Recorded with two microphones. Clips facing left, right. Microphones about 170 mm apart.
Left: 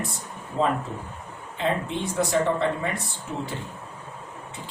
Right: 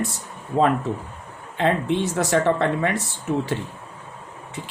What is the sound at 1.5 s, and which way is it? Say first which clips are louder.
Speech: right 6 dB; 70° right (ahead or behind).